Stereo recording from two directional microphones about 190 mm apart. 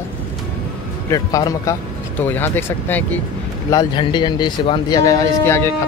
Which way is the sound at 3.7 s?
25° left (ahead or behind).